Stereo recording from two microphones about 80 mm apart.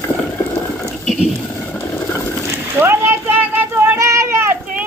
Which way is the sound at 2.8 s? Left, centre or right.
Right.